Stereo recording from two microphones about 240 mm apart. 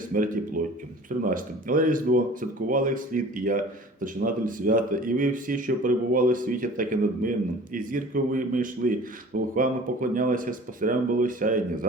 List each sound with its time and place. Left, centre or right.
0.1 s speech: right